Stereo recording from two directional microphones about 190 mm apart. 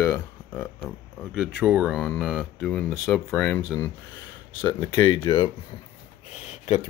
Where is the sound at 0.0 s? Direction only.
15° left (ahead or behind).